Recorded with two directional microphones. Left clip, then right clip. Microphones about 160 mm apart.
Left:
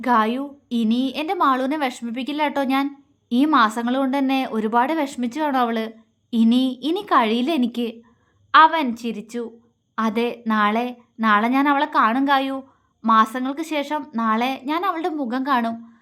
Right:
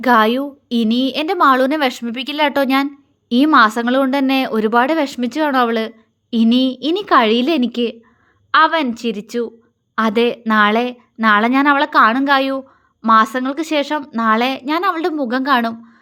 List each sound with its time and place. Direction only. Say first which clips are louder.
0.0 s a woman's voice: right 6 dB; 30° right (ahead or behind)